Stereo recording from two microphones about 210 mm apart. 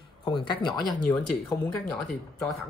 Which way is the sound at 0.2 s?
20° left (ahead or behind).